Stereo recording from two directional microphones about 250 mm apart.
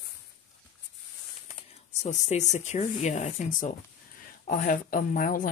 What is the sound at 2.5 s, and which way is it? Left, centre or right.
Speech, left.